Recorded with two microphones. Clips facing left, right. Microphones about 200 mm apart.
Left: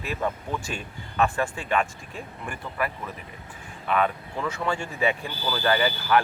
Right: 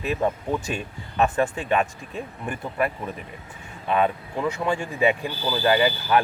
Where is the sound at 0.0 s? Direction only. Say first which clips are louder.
Right 5 dB; 20° right (ahead or behind).